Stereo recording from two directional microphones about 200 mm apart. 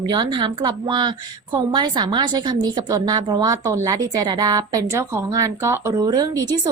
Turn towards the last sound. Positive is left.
turn(degrees=-20)  # may be behind; listen again after turning